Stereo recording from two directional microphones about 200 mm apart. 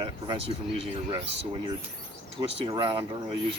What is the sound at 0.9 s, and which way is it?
Speech, 25° right (ahead or behind).